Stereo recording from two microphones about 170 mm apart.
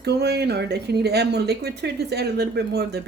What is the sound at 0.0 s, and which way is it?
Speech, 75° right (ahead or behind).